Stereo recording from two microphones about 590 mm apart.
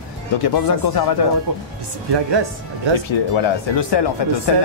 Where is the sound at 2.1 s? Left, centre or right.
Right.